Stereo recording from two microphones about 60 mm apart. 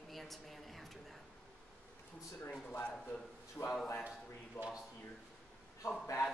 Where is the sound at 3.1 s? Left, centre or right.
Left.